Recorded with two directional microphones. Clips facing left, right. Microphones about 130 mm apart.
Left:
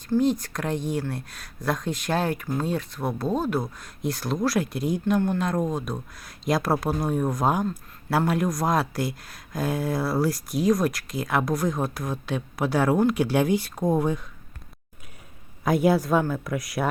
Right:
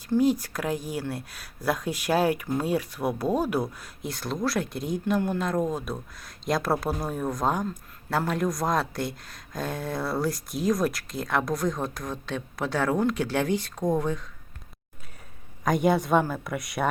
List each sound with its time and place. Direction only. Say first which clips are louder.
0.2 s a woman's voice: right 1 dB; 5° right (ahead or behind)
4.0 s speech: left 4 dB; centre (ahead or behind)
15.6 s speech: left 2 dB; 5° left (ahead or behind)